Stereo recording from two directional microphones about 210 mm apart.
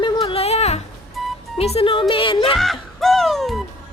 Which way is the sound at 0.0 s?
25° left (ahead or behind).